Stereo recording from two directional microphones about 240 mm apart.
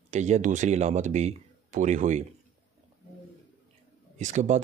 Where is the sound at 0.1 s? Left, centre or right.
Right.